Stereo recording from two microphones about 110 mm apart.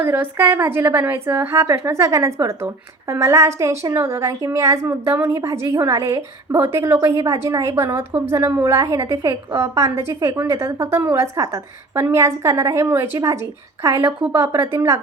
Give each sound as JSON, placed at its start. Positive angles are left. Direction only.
{"t": 0.0, "sound": "a woman's voice", "side_deg": -20}
{"t": 14.2, "sound": "a woman's voice", "side_deg": -15}